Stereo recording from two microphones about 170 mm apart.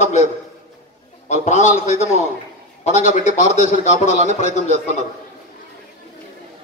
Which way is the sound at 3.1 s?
45° left (ahead or behind).